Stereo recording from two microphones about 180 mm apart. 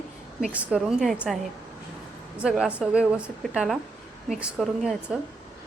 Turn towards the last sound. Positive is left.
turn(degrees=0)  # may be behind; listen again after turning